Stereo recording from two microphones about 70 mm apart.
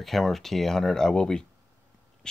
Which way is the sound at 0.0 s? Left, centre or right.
Centre.